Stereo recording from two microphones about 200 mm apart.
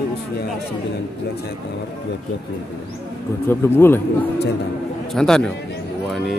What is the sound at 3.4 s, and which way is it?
A man's voice, 10° left (ahead or behind).